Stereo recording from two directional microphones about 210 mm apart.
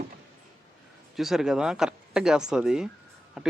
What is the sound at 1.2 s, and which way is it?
Speech, centre (ahead or behind).